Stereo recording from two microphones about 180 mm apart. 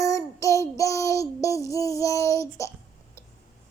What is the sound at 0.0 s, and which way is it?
Child singing, 20° left (ahead or behind).